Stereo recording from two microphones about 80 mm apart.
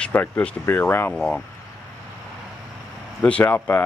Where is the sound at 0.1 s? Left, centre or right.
Left.